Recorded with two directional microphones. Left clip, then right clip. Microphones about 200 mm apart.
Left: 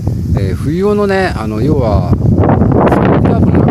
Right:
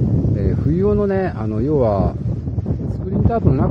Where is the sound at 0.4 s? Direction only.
15° left (ahead or behind).